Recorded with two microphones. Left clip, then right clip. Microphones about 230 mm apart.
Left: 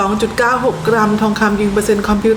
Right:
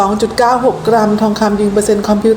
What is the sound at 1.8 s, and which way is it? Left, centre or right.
Speech, centre.